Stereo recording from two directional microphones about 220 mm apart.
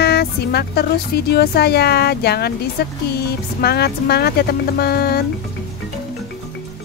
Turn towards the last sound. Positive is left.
turn(degrees=45)  # may be behind; listen again after turning